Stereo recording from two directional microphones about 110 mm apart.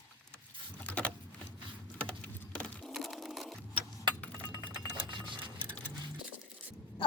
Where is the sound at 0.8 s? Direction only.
10° left (ahead or behind).